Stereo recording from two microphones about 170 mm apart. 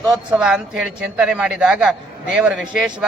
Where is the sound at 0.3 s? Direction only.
5° right (ahead or behind).